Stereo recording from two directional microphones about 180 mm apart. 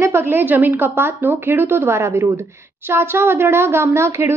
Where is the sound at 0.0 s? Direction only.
10° right (ahead or behind).